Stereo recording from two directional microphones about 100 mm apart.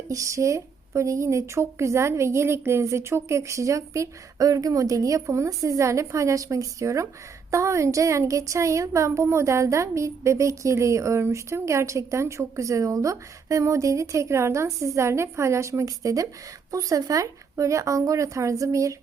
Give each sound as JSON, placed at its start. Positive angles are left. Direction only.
{"t": 0.1, "sound": "a woman's voice", "side_deg": -30}